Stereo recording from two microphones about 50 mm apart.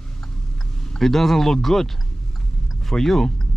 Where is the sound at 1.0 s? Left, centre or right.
Centre.